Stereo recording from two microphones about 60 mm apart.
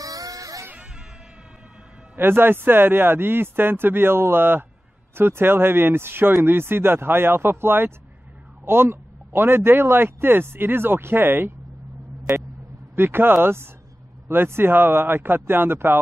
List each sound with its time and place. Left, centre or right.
0.0 s music: right
2.1 s a man's voice: right
12.9 s a man's voice: right